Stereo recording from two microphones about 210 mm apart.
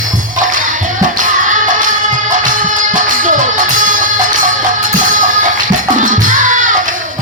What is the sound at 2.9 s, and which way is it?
Music, 40° right (ahead or behind).